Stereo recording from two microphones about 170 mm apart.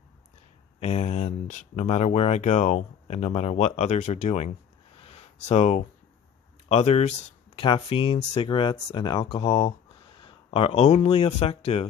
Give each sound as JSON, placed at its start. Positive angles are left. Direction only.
{"t": 0.7, "sound": "speech", "side_deg": 40}
{"t": 4.9, "sound": "a sound", "side_deg": 35}
{"t": 6.7, "sound": "speech", "side_deg": 40}